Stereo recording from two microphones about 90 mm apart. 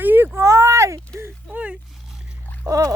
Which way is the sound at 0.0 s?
20° right (ahead or behind).